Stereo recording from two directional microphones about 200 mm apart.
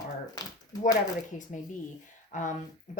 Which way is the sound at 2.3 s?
40° left (ahead or behind).